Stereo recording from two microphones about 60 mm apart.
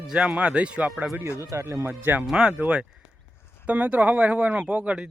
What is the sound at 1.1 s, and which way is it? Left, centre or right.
Speech, right.